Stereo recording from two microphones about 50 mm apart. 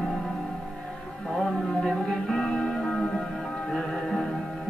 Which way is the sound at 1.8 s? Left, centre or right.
Centre.